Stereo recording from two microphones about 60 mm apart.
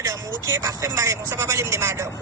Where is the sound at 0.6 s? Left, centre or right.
Right.